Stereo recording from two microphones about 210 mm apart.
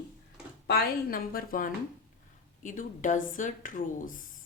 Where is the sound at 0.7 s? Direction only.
45° left (ahead or behind).